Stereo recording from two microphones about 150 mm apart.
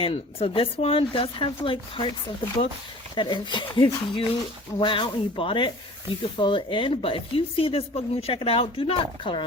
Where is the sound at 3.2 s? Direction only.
30° left (ahead or behind).